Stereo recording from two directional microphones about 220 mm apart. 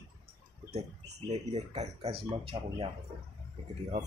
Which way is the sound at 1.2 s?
30° right (ahead or behind).